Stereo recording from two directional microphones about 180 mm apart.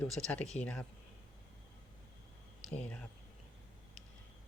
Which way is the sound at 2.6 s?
5° left (ahead or behind).